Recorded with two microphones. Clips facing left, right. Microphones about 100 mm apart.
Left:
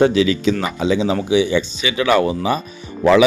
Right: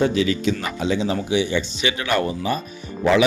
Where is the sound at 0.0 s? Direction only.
90° left.